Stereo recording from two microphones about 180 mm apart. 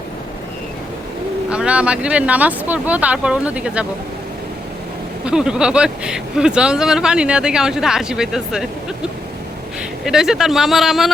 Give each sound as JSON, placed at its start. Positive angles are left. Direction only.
{"t": 1.5, "sound": "speech", "side_deg": -5}
{"t": 5.2, "sound": "speech", "side_deg": -5}
{"t": 10.1, "sound": "speech", "side_deg": 0}